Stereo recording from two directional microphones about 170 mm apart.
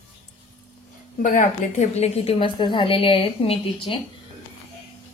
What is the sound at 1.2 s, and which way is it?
A woman's voice, 50° left (ahead or behind).